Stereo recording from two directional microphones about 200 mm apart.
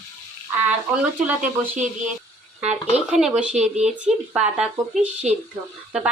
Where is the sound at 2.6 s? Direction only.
35° right (ahead or behind).